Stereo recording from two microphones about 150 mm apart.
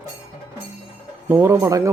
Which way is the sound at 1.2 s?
15° right (ahead or behind).